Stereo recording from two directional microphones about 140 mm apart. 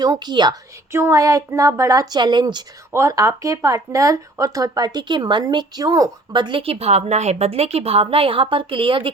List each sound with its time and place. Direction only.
0.0 s a woman's voice: 30° right (ahead or behind)